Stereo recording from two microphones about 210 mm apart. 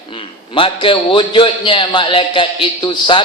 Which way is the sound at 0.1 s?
25° left (ahead or behind).